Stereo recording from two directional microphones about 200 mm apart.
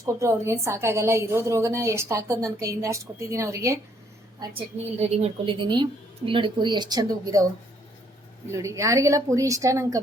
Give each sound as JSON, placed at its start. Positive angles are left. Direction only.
{"t": 0.0, "sound": "a woman's voice", "side_deg": -15}
{"t": 4.4, "sound": "a woman's voice", "side_deg": -30}
{"t": 8.4, "sound": "a woman's voice", "side_deg": -15}